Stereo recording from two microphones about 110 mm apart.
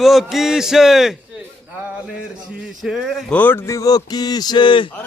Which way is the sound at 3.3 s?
15° left (ahead or behind).